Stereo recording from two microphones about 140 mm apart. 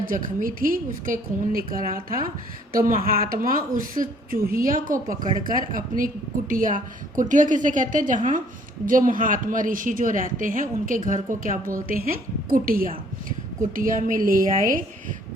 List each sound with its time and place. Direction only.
0.0 s a woman's voice: 75° right (ahead or behind)